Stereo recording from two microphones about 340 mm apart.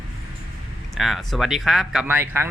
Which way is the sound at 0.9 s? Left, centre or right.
Centre.